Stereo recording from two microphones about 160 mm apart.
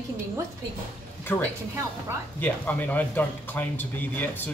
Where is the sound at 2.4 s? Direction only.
10° left (ahead or behind).